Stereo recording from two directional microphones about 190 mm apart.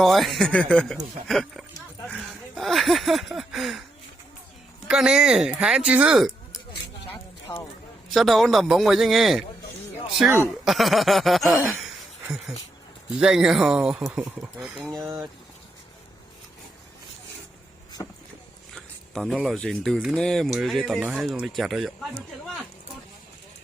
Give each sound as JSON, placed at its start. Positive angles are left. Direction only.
{"t": 0.0, "sound": "speech", "side_deg": 0}
{"t": 2.0, "sound": "a sound", "side_deg": 0}
{"t": 4.9, "sound": "speech", "side_deg": -5}
{"t": 8.1, "sound": "speech", "side_deg": 0}
{"t": 10.7, "sound": "speech", "side_deg": 0}
{"t": 13.1, "sound": "speech", "side_deg": -5}
{"t": 15.0, "sound": "a sound", "side_deg": -20}
{"t": 18.0, "sound": "speech", "side_deg": 20}
{"t": 18.7, "sound": "speech", "side_deg": 0}